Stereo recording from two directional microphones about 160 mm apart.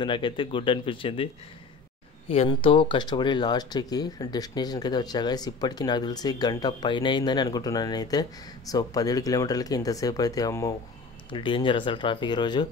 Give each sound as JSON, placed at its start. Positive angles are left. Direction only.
{"t": 0.0, "sound": "speech", "side_deg": 30}
{"t": 11.2, "sound": "speech", "side_deg": 30}